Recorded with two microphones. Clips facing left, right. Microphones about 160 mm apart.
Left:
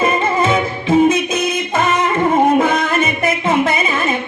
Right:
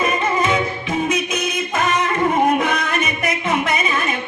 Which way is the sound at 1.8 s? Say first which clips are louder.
Left 3 dB; 25° left (ahead or behind).